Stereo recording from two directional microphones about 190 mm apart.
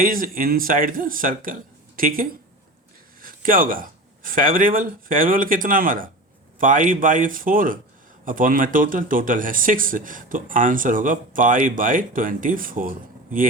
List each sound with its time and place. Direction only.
0.0 s speech: 50° right (ahead or behind)